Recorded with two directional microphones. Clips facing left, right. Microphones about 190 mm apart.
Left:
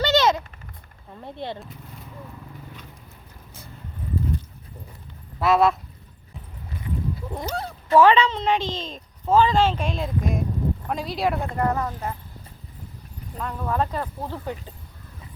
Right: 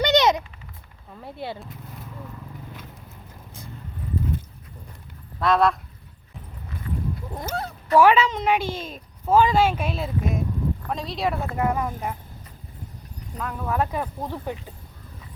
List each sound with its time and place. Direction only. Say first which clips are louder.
0.0 s a sound: right 1 dB; 20° right (ahead or behind)
1.2 s speech: left 1 dB; 5° right (ahead or behind)
5.4 s speech: left 1 dB; 5° left (ahead or behind)
7.3 s speech: even; centre (ahead or behind)
13.4 s speech: even; 5° right (ahead or behind)